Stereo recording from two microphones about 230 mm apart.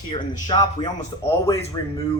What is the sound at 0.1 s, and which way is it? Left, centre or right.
Speech, centre.